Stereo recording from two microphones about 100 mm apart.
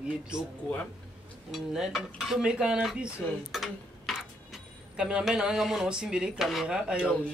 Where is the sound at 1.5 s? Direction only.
5° right (ahead or behind).